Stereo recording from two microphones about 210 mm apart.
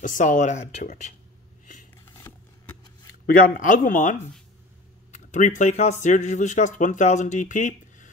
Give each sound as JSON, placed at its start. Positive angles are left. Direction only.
{"t": 0.0, "sound": "speech", "side_deg": 40}
{"t": 3.3, "sound": "speech", "side_deg": 40}